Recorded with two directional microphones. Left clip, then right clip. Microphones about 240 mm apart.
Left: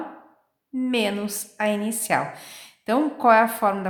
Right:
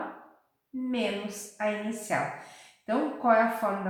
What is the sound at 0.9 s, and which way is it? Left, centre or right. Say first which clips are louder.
A woman's voice: left 6 dB; left.